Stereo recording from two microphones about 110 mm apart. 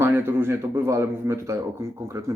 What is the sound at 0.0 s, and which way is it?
Speech, 20° right (ahead or behind).